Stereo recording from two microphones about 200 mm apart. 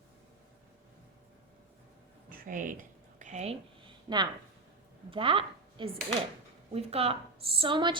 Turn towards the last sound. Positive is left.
turn(degrees=-25)  # may be behind; listen again after turning